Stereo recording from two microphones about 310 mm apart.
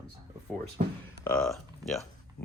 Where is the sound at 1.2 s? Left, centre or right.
Centre.